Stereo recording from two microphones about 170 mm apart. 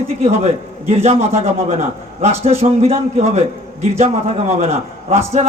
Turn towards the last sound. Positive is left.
turn(degrees=-40)  # may be behind; listen again after turning